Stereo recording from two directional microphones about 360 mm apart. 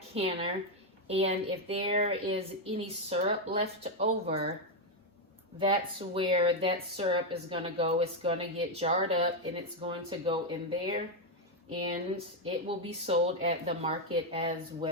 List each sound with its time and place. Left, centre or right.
0.1 s speech: centre
5.5 s speech: centre
12.1 s speech: centre